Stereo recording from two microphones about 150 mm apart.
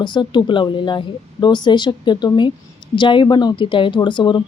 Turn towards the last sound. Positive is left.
turn(degrees=30)  # may be behind; listen again after turning